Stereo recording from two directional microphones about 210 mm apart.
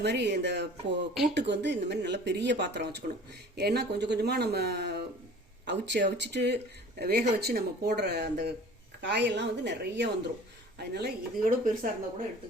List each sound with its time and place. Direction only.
0.0 s speech: 55° right (ahead or behind)